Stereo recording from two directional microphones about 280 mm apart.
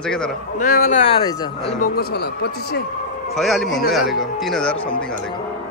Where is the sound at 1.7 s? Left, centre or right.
Left.